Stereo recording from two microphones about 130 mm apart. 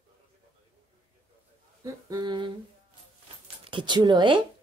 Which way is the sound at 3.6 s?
40° right (ahead or behind).